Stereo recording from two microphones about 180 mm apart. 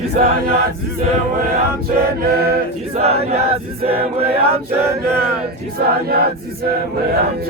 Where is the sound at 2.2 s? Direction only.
60° right (ahead or behind).